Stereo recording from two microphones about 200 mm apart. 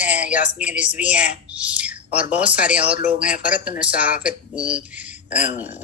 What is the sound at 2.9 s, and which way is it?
Speech, 40° left (ahead or behind).